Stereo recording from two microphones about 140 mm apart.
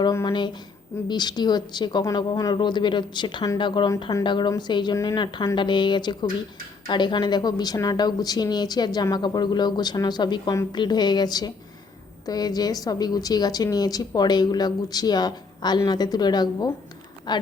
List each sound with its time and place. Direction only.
0.1 s a woman's voice: 20° left (ahead or behind)
1.0 s a woman's voice: 30° left (ahead or behind)